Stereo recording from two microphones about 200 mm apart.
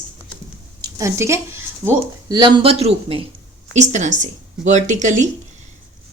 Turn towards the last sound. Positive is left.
turn(degrees=-35)  # may be behind; listen again after turning